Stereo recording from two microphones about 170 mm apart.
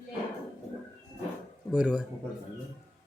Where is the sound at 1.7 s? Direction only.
5° right (ahead or behind).